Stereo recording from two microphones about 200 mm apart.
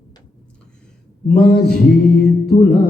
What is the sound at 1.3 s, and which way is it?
Speech, centre (ahead or behind).